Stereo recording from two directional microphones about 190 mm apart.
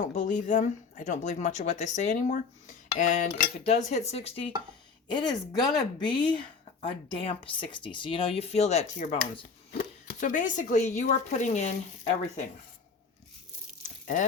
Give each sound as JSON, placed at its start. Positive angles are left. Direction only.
{"t": 0.0, "sound": "speech", "side_deg": 40}
{"t": 2.9, "sound": "cutlery", "side_deg": 40}
{"t": 3.6, "sound": "speech", "side_deg": 35}
{"t": 9.7, "sound": "speech", "side_deg": 50}
{"t": 13.8, "sound": "a sound", "side_deg": 40}